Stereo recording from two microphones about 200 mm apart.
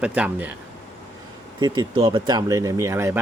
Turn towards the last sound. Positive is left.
turn(degrees=-15)  # may be behind; listen again after turning